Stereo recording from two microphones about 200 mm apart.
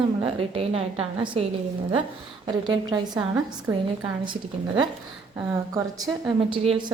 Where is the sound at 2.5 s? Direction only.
20° right (ahead or behind).